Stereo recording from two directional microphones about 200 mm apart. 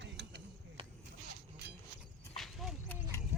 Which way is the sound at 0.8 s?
25° right (ahead or behind).